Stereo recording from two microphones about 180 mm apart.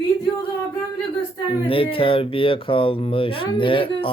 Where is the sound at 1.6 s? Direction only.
30° left (ahead or behind).